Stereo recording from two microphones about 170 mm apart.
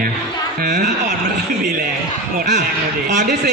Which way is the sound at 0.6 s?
45° right (ahead or behind).